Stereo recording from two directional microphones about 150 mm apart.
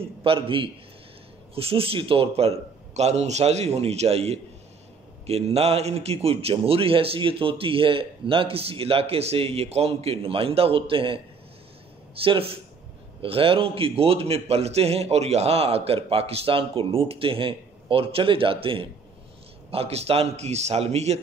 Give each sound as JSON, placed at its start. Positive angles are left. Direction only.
{"t": 0.2, "sound": "a man's voice", "side_deg": -35}
{"t": 12.2, "sound": "a man's voice", "side_deg": -40}